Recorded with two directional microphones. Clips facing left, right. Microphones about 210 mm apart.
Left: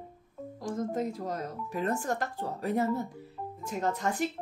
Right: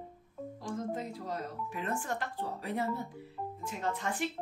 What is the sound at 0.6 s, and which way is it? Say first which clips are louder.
Speech: left 6 dB; 45° left (ahead or behind).